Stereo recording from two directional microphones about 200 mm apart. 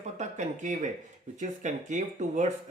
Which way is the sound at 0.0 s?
35° right (ahead or behind).